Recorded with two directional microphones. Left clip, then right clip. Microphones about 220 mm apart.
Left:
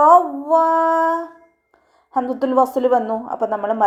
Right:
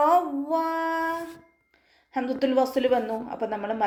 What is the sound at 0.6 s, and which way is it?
Child singing, 30° left (ahead or behind).